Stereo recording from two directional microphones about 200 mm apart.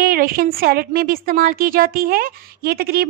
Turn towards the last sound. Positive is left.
turn(degrees=-50)  # may be behind; listen again after turning